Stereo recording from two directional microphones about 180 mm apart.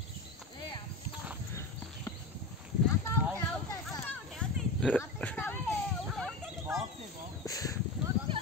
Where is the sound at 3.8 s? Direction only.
5° left (ahead or behind).